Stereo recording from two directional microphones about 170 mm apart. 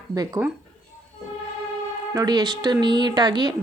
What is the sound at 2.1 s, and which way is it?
A woman's voice, 25° right (ahead or behind).